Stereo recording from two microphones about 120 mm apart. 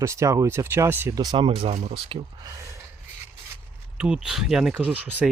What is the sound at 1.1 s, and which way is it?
Speech, 35° right (ahead or behind).